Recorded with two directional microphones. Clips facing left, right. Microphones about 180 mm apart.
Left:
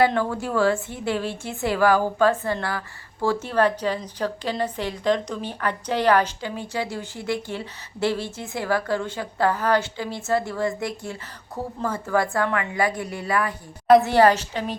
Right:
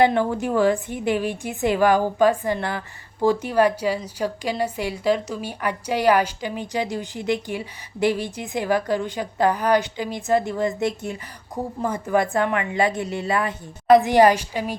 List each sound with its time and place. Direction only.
0.0 s a woman's voice: 20° right (ahead or behind)